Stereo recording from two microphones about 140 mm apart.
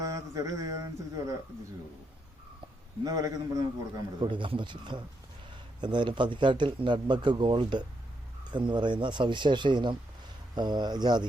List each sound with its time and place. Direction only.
0.0 s mantra: 25° right (ahead or behind)
3.0 s a man's voice: 25° right (ahead or behind)
4.2 s speech: 35° right (ahead or behind)